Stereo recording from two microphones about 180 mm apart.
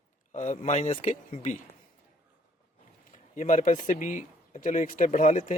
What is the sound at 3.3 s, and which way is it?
Speech, 45° left (ahead or behind).